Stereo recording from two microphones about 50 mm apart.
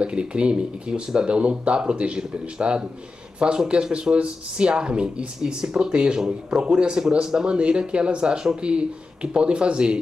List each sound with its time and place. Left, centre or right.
0.0 s speech: right